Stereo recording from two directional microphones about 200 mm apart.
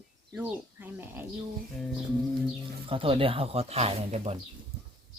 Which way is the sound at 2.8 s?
25° right (ahead or behind).